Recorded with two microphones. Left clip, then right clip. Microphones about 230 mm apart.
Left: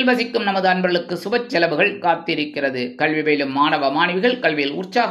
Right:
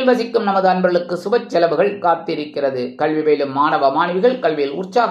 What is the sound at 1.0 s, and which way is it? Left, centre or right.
Speech, left.